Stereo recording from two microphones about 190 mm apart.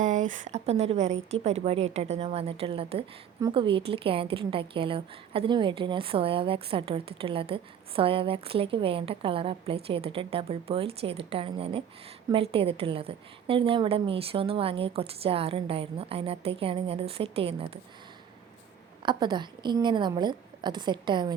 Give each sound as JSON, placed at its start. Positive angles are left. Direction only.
{"t": 0.0, "sound": "a woman's voice", "side_deg": -40}
{"t": 19.0, "sound": "a woman's voice", "side_deg": -25}